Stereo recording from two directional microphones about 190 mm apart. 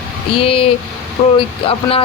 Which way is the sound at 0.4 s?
30° left (ahead or behind).